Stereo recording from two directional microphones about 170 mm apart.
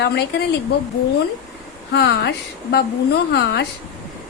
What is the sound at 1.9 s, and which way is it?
Speech, 85° left.